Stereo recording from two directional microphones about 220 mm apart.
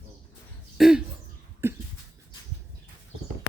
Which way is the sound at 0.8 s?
Centre (ahead or behind).